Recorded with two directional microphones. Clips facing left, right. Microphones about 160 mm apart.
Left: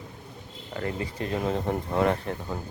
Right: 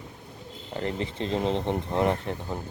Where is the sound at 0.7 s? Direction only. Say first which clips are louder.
Right 1 dB; 25° right (ahead or behind).